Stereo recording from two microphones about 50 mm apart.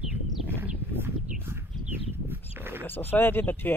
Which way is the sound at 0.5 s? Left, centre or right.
Right.